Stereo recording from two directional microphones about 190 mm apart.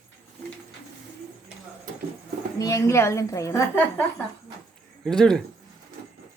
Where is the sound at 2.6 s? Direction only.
15° left (ahead or behind).